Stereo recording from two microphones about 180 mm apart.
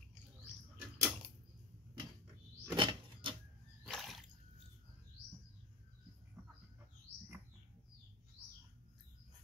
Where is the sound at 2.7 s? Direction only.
25° right (ahead or behind).